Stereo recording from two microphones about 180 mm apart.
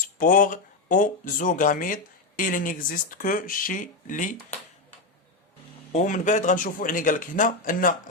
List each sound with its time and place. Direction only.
0.2 s speech: 50° left (ahead or behind)
5.9 s speech: 45° left (ahead or behind)